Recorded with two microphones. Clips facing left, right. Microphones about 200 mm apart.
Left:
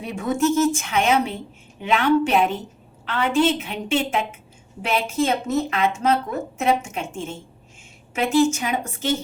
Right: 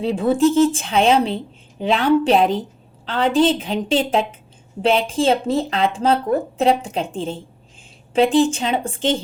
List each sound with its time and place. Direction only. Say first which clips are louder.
0.0 s speech: right 6 dB; 30° right (ahead or behind)